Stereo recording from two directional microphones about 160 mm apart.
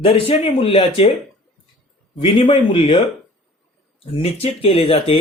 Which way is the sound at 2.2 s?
30° left (ahead or behind).